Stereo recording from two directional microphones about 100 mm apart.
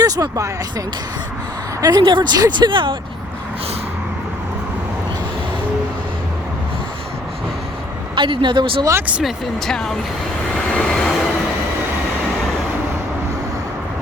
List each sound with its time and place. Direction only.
0.0 s speech: 35° right (ahead or behind)
1.8 s speech: 40° right (ahead or behind)
2.4 s speech: 50° right (ahead or behind)
8.1 s speech: 55° right (ahead or behind)
9.0 s speech: 15° right (ahead or behind)
9.2 s speech: 5° left (ahead or behind)
10.7 s vehicle: 5° left (ahead or behind)